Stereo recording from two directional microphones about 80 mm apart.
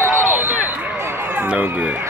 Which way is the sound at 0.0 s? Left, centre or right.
Right.